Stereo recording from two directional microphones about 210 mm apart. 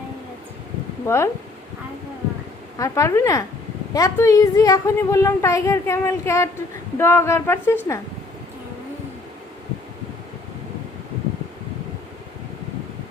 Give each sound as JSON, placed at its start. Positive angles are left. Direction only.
{"t": 1.0, "sound": "a woman's voice", "side_deg": 10}
{"t": 2.7, "sound": "a woman's voice", "side_deg": 15}